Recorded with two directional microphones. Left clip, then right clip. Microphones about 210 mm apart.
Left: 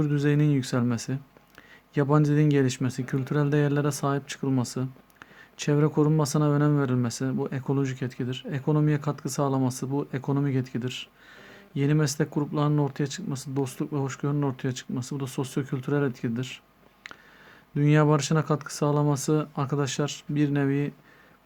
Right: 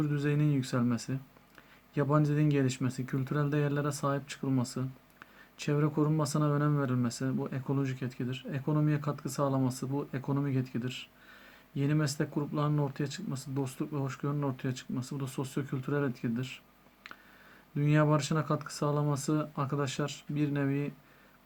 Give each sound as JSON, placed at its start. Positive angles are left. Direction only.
{"t": 0.0, "sound": "speech", "side_deg": 45}
{"t": 17.7, "sound": "speech", "side_deg": 45}